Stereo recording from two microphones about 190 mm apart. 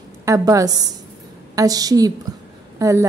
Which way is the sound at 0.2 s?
15° right (ahead or behind).